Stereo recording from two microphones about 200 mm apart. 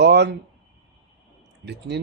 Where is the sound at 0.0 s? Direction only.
55° right (ahead or behind).